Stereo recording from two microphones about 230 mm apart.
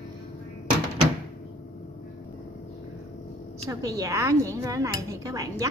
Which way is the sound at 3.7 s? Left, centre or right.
Centre.